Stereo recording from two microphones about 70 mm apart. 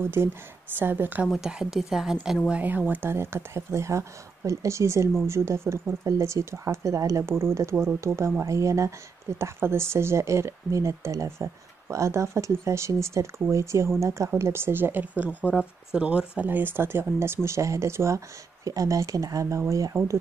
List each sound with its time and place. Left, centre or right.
0.0 s speech: right
1.2 s a woman's voice: centre
2.5 s a woman's voice: right
16.4 s speech: right